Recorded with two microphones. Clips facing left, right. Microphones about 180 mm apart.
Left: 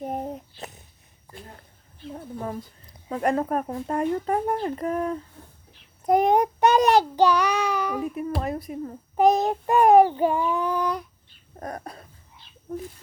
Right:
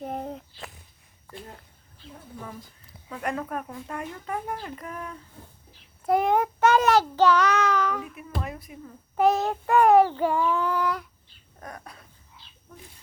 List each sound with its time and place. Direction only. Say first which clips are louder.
0.0 s a sound: left 2 dB; 15° left (ahead or behind)
2.1 s speech: left 8 dB; 45° left (ahead or behind)
6.1 s child singing: left 3 dB; 20° left (ahead or behind)
8.0 s speech: left 8 dB; 40° left (ahead or behind)
9.1 s child singing: left 3 dB; 15° left (ahead or behind)
11.6 s a sound: left 7 dB; 40° left (ahead or behind)
12.7 s speech: left 16 dB; 45° left (ahead or behind)